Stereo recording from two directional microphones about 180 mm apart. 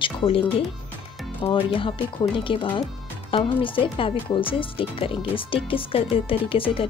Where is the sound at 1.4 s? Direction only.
30° left (ahead or behind).